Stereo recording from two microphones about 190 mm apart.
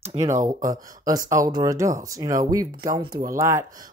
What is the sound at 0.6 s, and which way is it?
Speech, 20° right (ahead or behind).